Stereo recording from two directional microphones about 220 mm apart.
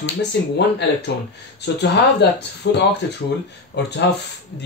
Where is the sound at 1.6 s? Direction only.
50° left (ahead or behind).